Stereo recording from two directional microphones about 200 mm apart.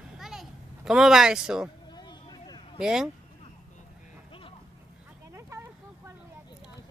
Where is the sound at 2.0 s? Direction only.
20° left (ahead or behind).